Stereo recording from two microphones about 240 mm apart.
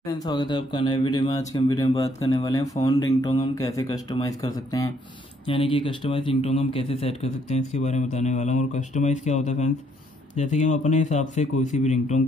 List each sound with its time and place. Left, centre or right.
0.2 s speech: centre